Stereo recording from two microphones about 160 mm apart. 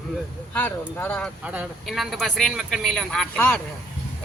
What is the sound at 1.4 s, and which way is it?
Speech, 10° right (ahead or behind).